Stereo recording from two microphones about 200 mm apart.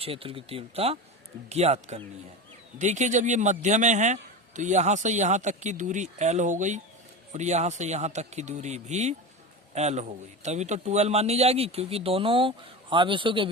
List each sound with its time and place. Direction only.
0.0 s a man's voice: 30° right (ahead or behind)